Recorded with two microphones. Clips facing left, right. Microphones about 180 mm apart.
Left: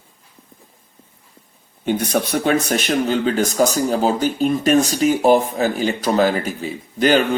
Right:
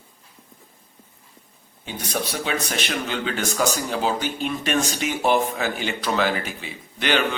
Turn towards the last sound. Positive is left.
turn(degrees=40)  # may be behind; listen again after turning